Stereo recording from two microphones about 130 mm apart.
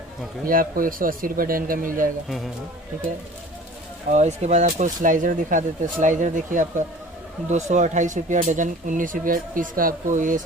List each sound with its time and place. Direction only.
0.5 s speech: 90° right
2.2 s speech: centre (ahead or behind)
4.1 s speech: 60° right (ahead or behind); by 10.4 s 80° right